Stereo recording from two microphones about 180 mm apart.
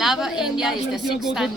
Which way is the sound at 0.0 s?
Centre (ahead or behind).